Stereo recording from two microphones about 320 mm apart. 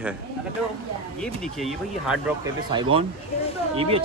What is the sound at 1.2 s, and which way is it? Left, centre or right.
Speech, centre.